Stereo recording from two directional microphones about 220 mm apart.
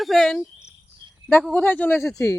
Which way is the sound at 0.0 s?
Centre (ahead or behind).